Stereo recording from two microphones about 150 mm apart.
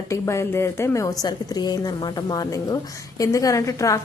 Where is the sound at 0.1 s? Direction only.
20° left (ahead or behind).